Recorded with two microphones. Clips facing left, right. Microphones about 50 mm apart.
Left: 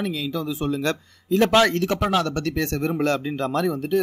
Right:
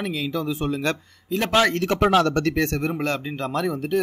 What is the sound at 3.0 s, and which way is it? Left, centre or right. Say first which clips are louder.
Speech: left 3 dB; right.